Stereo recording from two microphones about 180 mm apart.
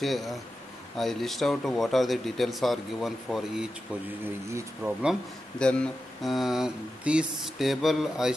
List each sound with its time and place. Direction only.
0.0 s speech: centre (ahead or behind)
4.5 s speech: 15° right (ahead or behind)
5.6 s speech: 5° left (ahead or behind)